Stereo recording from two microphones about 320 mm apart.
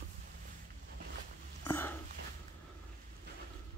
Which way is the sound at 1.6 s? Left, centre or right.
Centre.